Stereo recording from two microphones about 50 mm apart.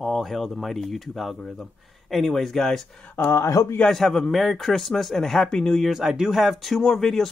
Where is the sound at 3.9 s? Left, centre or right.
Centre.